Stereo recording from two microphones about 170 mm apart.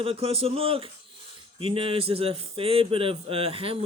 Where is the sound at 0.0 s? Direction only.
35° right (ahead or behind).